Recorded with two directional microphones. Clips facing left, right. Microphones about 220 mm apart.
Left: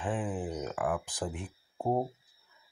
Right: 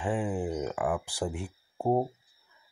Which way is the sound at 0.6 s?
Centre (ahead or behind).